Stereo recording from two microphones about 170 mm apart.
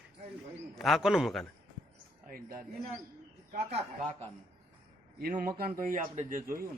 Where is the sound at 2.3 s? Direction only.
60° right (ahead or behind).